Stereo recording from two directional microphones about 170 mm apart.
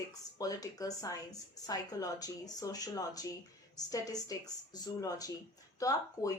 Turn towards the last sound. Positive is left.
turn(degrees=20)  # may be behind; listen again after turning